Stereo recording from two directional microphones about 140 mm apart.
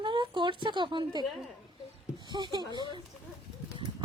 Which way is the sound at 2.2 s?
30° right (ahead or behind).